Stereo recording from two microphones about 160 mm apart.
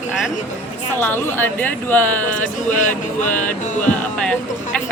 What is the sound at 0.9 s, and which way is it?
A woman's voice, 15° left (ahead or behind).